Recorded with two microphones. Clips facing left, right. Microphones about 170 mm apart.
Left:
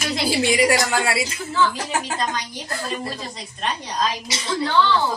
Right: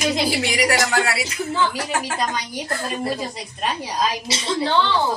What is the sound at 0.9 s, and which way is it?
Speech, 25° left (ahead or behind).